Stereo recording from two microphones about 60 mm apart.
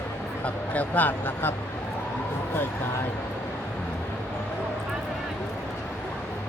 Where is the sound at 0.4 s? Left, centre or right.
Left.